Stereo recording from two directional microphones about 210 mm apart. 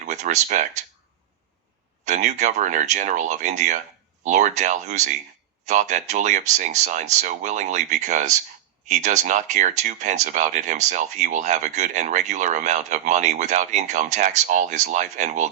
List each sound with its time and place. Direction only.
0.0 s speech: 35° right (ahead or behind)
2.0 s speech: 35° right (ahead or behind)